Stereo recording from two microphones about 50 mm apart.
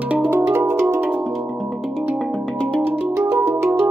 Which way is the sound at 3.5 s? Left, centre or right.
Right.